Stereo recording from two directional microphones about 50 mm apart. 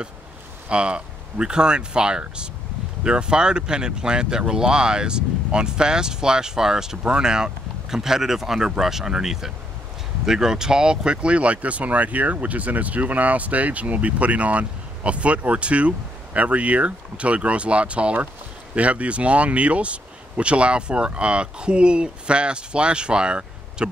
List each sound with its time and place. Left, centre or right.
0.7 s speech: right